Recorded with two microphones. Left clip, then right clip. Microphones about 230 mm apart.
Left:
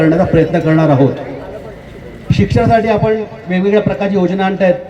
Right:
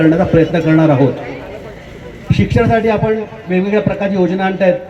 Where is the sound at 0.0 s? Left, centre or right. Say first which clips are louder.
Even; left.